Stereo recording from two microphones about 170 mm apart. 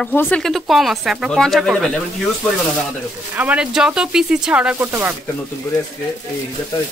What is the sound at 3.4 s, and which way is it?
Speech, 5° right (ahead or behind).